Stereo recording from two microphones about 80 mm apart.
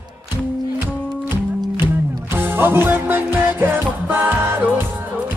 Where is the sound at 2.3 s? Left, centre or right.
Right.